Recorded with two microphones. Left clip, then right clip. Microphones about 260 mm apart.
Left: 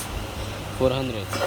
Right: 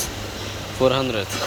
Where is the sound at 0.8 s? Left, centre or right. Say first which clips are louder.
Right 5 dB; centre.